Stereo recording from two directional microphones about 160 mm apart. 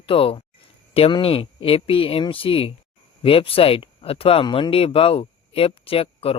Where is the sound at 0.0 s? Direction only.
35° left (ahead or behind).